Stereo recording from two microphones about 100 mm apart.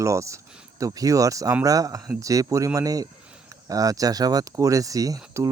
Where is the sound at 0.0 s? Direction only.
30° right (ahead or behind).